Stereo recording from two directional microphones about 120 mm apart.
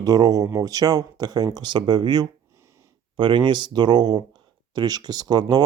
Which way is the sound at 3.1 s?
40° right (ahead or behind).